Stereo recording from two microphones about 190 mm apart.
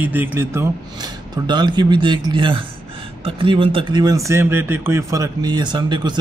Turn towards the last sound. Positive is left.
turn(degrees=-25)  # may be behind; listen again after turning